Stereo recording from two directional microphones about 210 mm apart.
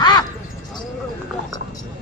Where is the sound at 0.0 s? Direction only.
20° left (ahead or behind).